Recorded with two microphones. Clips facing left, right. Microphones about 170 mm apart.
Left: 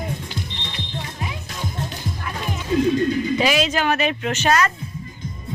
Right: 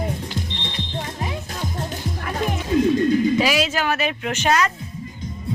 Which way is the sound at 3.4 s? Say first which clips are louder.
Left 1 dB; 5° right (ahead or behind).